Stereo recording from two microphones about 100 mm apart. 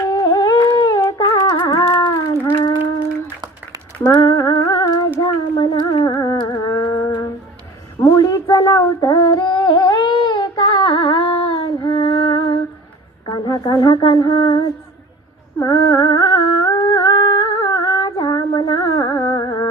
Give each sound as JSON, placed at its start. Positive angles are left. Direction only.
{"t": 0.0, "sound": "humming", "side_deg": 40}
{"t": 4.0, "sound": "humming", "side_deg": 45}
{"t": 5.2, "sound": "a sound", "side_deg": 40}
{"t": 15.5, "sound": "carnatic music", "side_deg": 45}